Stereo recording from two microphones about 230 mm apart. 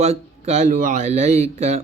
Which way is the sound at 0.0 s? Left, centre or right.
Right.